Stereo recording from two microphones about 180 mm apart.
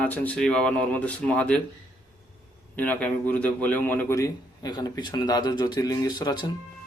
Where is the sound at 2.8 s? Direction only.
10° left (ahead or behind).